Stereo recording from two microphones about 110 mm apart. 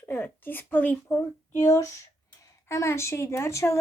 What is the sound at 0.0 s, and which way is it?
A woman's voice, 20° left (ahead or behind).